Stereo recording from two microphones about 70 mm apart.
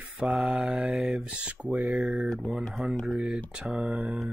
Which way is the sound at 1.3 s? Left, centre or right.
Centre.